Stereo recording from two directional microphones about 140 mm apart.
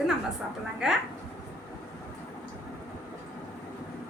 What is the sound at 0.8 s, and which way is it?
Speech, 5° right (ahead or behind).